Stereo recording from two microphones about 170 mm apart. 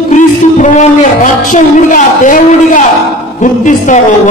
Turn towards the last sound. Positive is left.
turn(degrees=50)  # may be behind; listen again after turning